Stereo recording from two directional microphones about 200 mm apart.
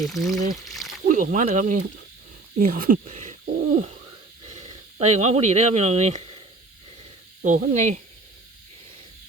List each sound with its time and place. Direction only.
0.0 s speech: centre (ahead or behind)
1.0 s speech: 40° right (ahead or behind)
7.7 s speech: 35° right (ahead or behind)